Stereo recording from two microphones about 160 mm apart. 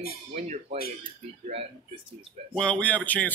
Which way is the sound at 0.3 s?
45° right (ahead or behind).